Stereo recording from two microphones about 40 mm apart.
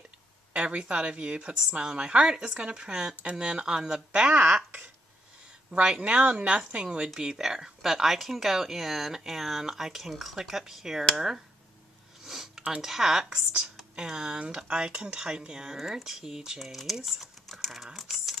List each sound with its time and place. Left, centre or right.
0.6 s a woman's voice: right
5.7 s a woman's voice: right
6.2 s a woman's voice: right
6.7 s a woman's voice: right
12.2 s a sound: centre
12.8 s speech: centre
13.9 s a woman's voice: right
17.5 s typing: centre